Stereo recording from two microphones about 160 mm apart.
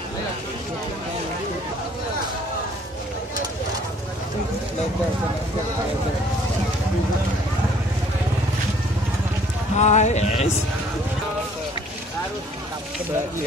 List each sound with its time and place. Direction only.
9.8 s speech: 45° left (ahead or behind)